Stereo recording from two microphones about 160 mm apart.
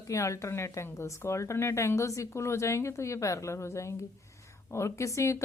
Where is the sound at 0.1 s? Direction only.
20° left (ahead or behind).